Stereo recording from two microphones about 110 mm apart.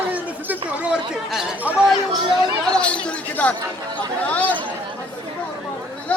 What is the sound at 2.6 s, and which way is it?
Speech, 10° left (ahead or behind).